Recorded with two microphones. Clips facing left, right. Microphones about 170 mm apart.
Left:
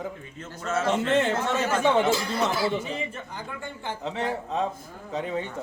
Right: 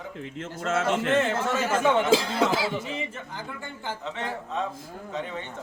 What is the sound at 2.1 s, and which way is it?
Speech, 90° right.